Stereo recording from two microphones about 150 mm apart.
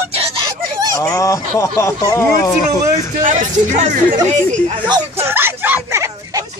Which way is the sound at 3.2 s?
60° right (ahead or behind).